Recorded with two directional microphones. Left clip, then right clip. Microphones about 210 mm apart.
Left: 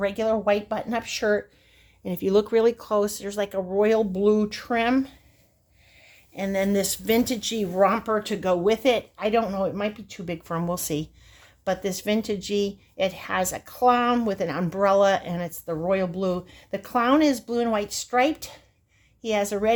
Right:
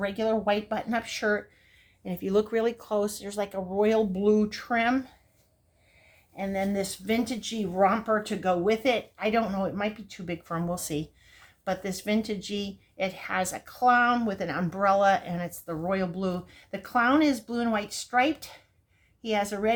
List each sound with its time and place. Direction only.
0.0 s speech: 25° left (ahead or behind)
6.3 s speech: 55° left (ahead or behind); by 19.7 s 35° left (ahead or behind)